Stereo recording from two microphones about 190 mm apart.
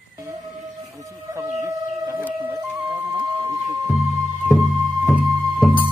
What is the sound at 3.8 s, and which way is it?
Music, centre (ahead or behind).